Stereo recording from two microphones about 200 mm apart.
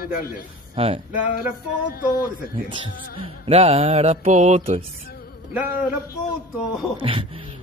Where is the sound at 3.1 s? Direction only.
30° right (ahead or behind).